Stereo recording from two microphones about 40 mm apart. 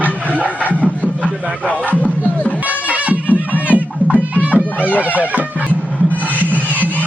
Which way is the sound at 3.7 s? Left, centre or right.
Right.